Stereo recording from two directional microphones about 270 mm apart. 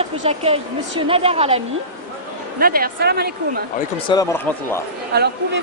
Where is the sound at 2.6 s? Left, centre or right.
Right.